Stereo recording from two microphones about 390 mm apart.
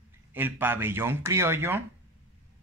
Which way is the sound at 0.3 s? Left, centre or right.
Centre.